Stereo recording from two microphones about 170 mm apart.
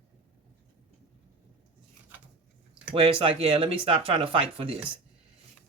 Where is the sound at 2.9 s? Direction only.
35° right (ahead or behind).